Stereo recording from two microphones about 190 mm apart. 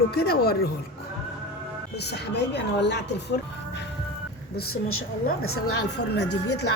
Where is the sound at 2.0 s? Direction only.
65° left (ahead or behind).